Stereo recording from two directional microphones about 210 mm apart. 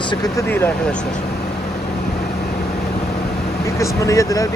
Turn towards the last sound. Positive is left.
turn(degrees=15)  # may be behind; listen again after turning